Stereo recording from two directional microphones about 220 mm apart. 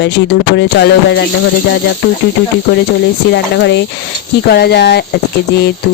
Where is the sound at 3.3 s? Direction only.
50° left (ahead or behind).